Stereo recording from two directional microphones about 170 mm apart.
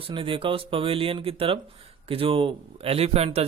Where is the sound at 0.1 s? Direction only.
30° right (ahead or behind).